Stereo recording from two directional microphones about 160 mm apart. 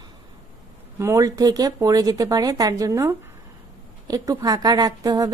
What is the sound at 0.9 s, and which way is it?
A woman's voice, 15° right (ahead or behind).